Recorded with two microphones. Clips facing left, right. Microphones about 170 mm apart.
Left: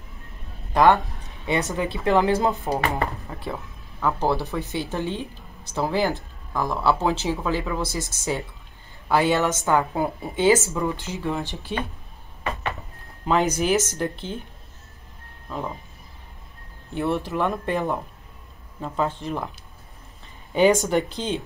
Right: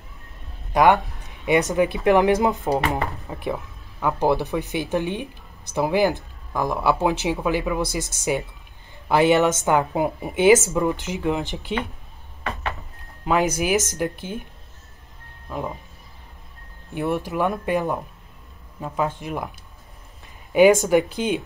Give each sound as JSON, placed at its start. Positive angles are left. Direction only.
{"t": 0.7, "sound": "a woman's voice", "side_deg": -20}
{"t": 13.2, "sound": "a woman's voice", "side_deg": -5}
{"t": 13.7, "sound": "a woman's voice", "side_deg": -15}
{"t": 16.9, "sound": "a woman's voice", "side_deg": -15}
{"t": 20.5, "sound": "a woman's voice", "side_deg": -15}